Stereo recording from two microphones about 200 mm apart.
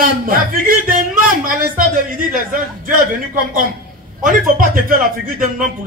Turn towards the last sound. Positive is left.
turn(degrees=-45)  # may be behind; listen again after turning